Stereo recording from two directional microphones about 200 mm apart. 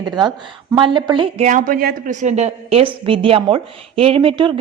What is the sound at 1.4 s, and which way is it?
A woman's voice, 40° right (ahead or behind).